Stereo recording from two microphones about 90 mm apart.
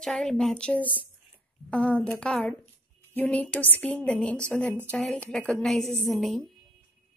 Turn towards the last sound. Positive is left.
turn(degrees=0)  # may be behind; listen again after turning